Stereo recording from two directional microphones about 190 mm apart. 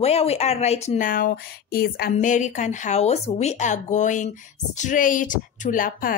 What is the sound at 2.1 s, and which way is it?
A woman's voice, 40° left (ahead or behind).